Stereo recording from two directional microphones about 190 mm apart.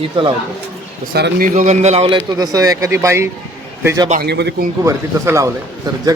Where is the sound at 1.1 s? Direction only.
50° right (ahead or behind); by 2.2 s 35° right (ahead or behind).